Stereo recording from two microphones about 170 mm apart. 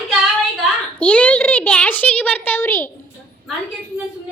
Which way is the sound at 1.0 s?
5° left (ahead or behind).